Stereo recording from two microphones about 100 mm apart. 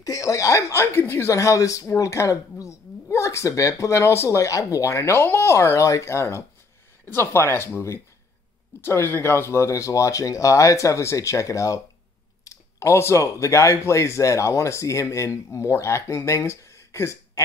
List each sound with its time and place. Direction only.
0.0 s speech: 35° left (ahead or behind)